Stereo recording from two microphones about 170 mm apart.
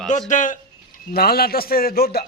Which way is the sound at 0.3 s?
50° left (ahead or behind).